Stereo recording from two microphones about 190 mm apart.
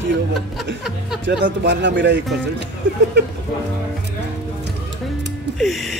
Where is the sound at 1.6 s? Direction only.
65° right (ahead or behind).